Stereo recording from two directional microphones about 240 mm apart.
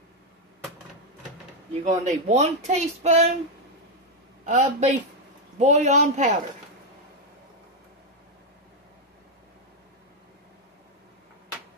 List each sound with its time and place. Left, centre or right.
1.9 s speech: right
4.5 s speech: right